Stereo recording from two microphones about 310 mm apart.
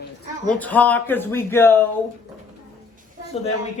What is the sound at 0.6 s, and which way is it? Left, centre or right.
Speech, centre.